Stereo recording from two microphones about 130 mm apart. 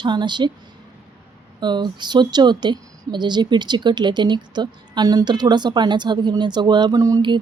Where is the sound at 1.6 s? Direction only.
35° right (ahead or behind).